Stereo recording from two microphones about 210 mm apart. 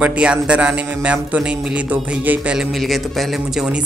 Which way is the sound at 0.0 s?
5° right (ahead or behind).